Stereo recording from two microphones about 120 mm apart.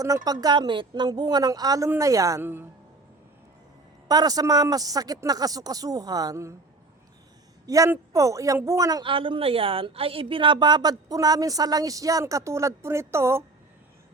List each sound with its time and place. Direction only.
0.4 s a woman's voice: 35° right (ahead or behind); by 2.6 s 20° right (ahead or behind)
4.1 s a woman's voice: 30° right (ahead or behind)
7.7 s speech: 25° right (ahead or behind)
9.0 s a woman's voice: 45° right (ahead or behind); by 13.4 s 20° right (ahead or behind)